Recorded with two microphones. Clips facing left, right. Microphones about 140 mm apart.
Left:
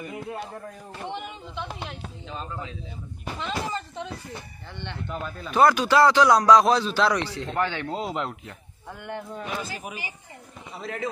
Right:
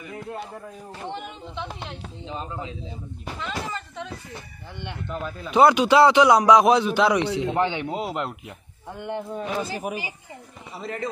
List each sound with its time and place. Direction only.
0.3 s speech: centre (ahead or behind)
2.2 s a man's voice: 20° right (ahead or behind)
3.3 s speech: 30° left (ahead or behind)
5.0 s speech: centre (ahead or behind)
5.5 s a man's voice: 20° right (ahead or behind)
7.9 s speech: 5° right (ahead or behind)
8.9 s a man's voice: 20° right (ahead or behind)
10.8 s speech: centre (ahead or behind)